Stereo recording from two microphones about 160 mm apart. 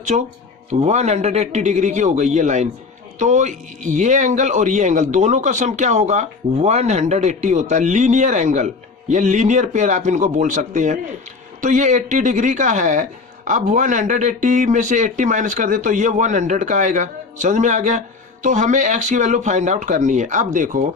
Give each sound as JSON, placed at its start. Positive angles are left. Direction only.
{"t": 0.1, "sound": "speech", "side_deg": -50}